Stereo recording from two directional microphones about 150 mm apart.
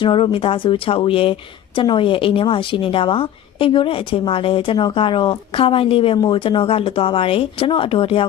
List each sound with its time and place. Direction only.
0.0 s speech: 35° left (ahead or behind)